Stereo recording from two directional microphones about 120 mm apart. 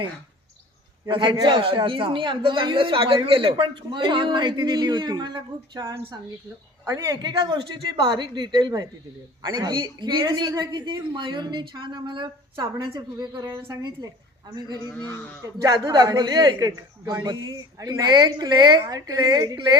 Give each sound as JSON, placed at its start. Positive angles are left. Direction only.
{"t": 1.0, "sound": "a man's voice", "side_deg": -40}
{"t": 5.8, "sound": "a woman's voice", "side_deg": -25}
{"t": 14.8, "sound": "speech", "side_deg": 30}
{"t": 15.6, "sound": "a man's voice", "side_deg": -30}